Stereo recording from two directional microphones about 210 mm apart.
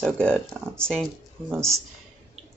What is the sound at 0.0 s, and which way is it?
Speech, 5° left (ahead or behind).